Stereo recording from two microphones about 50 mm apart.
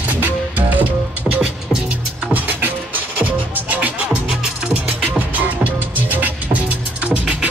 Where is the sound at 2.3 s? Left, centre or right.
Right.